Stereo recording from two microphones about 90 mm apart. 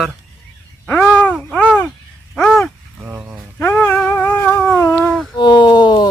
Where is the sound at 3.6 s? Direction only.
20° left (ahead or behind).